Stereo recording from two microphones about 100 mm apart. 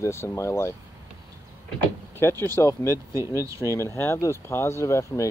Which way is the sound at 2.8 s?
30° right (ahead or behind).